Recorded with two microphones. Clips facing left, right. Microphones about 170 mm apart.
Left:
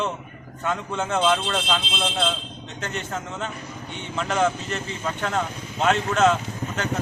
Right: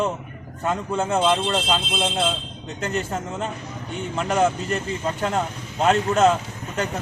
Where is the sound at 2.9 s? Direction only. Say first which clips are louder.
Right 5 dB; 40° right (ahead or behind).